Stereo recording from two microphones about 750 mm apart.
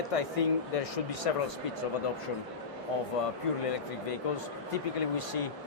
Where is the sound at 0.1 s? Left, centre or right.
Left.